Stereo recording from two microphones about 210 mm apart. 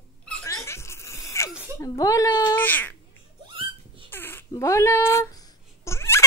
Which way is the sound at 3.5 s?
25° right (ahead or behind).